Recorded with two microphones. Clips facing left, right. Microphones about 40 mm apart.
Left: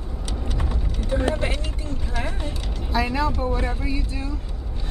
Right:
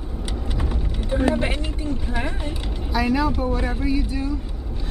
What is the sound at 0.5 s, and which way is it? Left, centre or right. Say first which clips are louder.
Vehicle: right 2 dB; centre.